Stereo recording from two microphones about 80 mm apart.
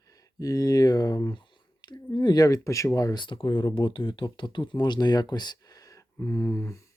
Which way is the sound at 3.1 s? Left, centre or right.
Left.